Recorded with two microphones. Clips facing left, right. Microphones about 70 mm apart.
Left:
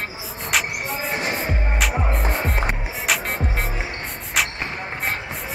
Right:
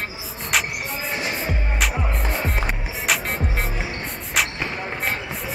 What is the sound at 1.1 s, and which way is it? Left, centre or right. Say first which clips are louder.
Music: left 2 dB; left.